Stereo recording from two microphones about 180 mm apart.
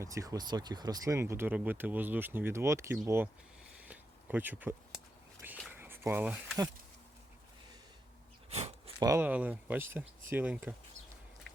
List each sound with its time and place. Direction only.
0.0 s speech: 20° right (ahead or behind)
3.8 s a sound: 10° right (ahead or behind)
5.8 s speech: 15° right (ahead or behind)
8.4 s a sound: 35° right (ahead or behind)
9.0 s speech: 20° right (ahead or behind)
9.2 s speech: 10° right (ahead or behind)